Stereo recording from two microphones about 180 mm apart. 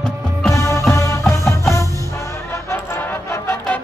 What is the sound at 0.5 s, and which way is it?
Music, 15° left (ahead or behind).